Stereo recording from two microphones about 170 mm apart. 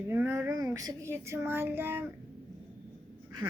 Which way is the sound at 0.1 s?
15° right (ahead or behind).